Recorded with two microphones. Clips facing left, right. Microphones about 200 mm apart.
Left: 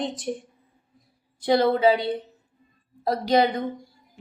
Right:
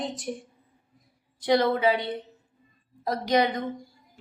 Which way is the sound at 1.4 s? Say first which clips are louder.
Left 3 dB; 30° left (ahead or behind).